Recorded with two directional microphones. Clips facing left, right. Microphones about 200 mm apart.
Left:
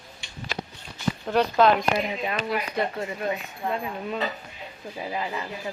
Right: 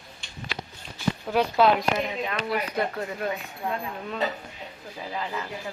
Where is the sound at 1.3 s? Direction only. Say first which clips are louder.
Left 1 dB; 10° right (ahead or behind).